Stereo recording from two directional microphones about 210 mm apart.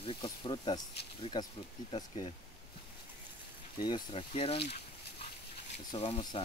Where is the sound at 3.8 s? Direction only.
20° left (ahead or behind).